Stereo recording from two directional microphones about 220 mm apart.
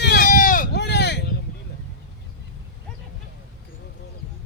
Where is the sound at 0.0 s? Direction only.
45° left (ahead or behind).